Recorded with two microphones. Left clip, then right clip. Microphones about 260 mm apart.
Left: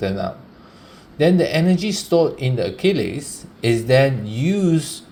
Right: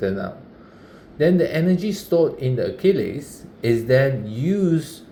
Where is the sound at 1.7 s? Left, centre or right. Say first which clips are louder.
Left 2 dB; left.